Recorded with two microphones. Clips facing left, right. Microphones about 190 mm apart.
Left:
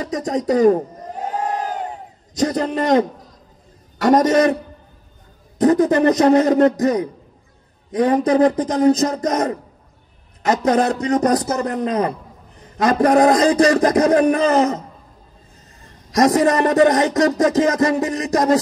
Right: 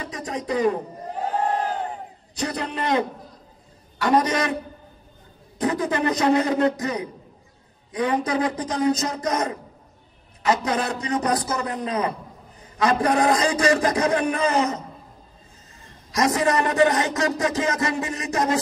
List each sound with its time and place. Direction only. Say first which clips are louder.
0.0 s a man's voice: left 9 dB; 40° left (ahead or behind)
2.3 s a man's voice: left 8 dB; 40° left (ahead or behind)
5.6 s a man's voice: left 9 dB; 40° left (ahead or behind)
16.2 s a man's voice: left 6 dB; 40° left (ahead or behind)